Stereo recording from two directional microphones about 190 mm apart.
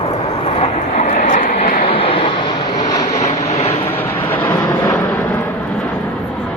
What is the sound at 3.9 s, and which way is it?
Vehicle, 10° left (ahead or behind).